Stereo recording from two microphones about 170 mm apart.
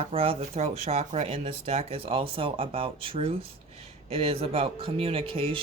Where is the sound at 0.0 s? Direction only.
35° right (ahead or behind).